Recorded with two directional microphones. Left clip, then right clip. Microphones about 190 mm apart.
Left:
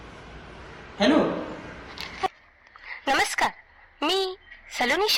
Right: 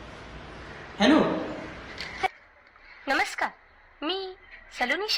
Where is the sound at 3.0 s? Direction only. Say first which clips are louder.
Left 3 dB; 30° left (ahead or behind).